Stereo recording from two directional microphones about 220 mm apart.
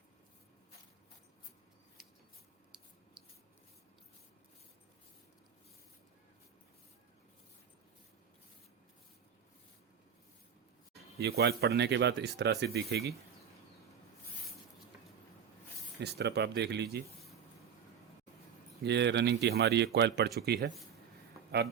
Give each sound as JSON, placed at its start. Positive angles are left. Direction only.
{"t": 11.2, "sound": "speech", "side_deg": -45}
{"t": 16.0, "sound": "speech", "side_deg": -50}
{"t": 18.8, "sound": "speech", "side_deg": -50}